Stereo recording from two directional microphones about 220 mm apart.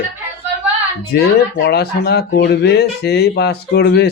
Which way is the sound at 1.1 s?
45° left (ahead or behind).